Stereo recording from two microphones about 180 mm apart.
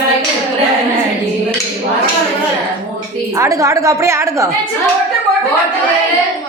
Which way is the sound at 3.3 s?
15° right (ahead or behind).